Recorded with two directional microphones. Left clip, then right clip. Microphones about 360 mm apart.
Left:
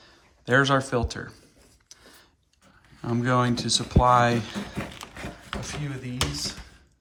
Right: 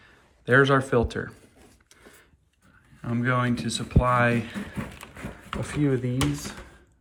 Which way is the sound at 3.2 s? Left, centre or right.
Centre.